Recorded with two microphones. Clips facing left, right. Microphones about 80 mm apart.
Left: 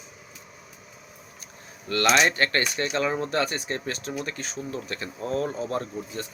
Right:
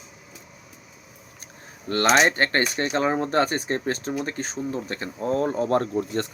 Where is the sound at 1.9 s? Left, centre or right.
Right.